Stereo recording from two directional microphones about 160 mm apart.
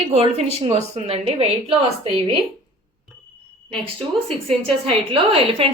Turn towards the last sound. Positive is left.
turn(degrees=-35)  # may be behind; listen again after turning